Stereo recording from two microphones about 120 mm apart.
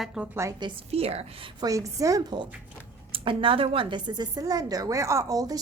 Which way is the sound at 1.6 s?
30° right (ahead or behind).